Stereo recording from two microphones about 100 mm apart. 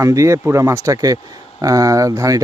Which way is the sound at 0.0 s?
30° right (ahead or behind).